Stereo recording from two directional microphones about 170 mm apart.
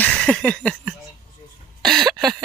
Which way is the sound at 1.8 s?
Centre (ahead or behind).